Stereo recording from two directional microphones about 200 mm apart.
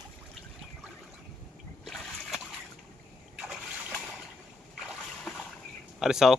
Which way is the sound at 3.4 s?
Centre (ahead or behind).